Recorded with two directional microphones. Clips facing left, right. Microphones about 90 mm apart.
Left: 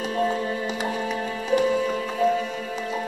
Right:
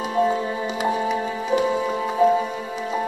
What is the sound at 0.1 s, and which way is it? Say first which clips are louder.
Music: right 4 dB; 15° right (ahead or behind).